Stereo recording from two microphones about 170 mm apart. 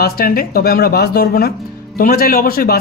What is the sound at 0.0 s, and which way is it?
A man's voice, 60° left (ahead or behind).